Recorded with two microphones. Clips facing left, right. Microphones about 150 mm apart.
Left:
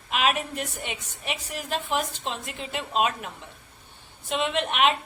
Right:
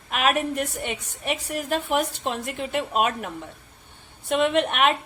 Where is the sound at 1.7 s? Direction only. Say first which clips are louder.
Right 4 dB; 65° right (ahead or behind).